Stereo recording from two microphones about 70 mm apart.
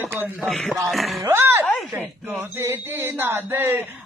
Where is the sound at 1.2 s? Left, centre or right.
Right.